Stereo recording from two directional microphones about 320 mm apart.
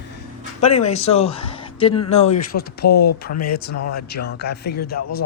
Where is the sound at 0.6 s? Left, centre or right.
Centre.